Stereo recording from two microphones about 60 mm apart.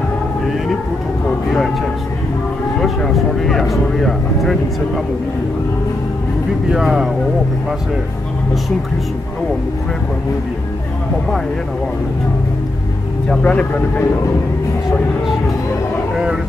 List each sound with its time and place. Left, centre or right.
2.8 s a sound: centre
6.7 s speech: centre
13.3 s speech: left